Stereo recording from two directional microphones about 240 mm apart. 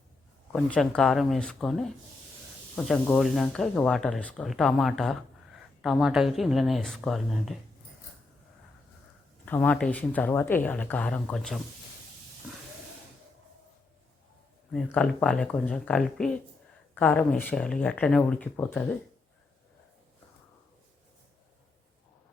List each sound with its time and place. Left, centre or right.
0.5 s speech: centre
9.5 s speech: centre
14.7 s speech: centre